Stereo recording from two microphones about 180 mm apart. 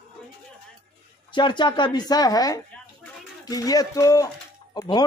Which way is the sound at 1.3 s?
25° left (ahead or behind).